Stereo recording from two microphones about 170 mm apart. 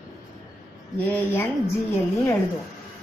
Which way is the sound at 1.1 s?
15° left (ahead or behind).